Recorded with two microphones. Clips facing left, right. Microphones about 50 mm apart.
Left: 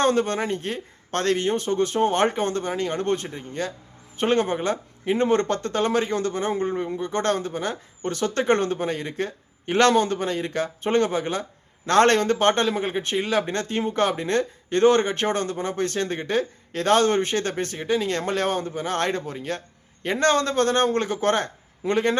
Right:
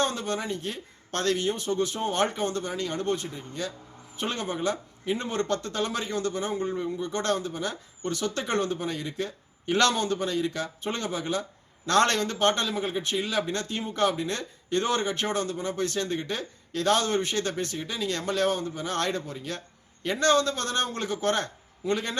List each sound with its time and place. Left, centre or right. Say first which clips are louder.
0.0 s a man's voice: left 7 dB; left